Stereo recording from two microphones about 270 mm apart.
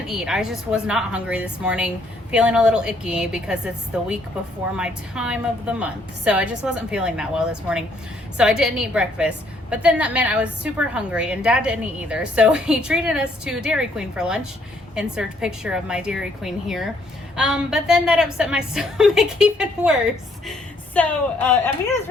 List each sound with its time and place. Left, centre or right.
0.0 s a woman's voice: centre